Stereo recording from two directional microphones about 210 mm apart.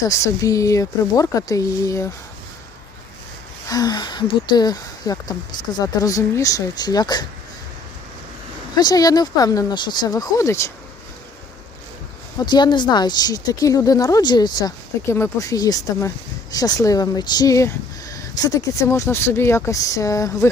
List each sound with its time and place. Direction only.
0.0 s speech: 15° left (ahead or behind)
3.7 s speech: 20° left (ahead or behind)
8.7 s speech: 20° left (ahead or behind)
12.4 s speech: 20° left (ahead or behind)